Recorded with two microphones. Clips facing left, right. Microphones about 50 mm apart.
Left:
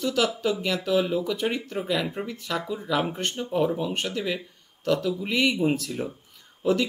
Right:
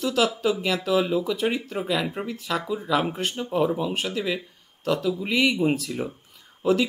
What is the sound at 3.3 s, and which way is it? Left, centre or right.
Speech, centre.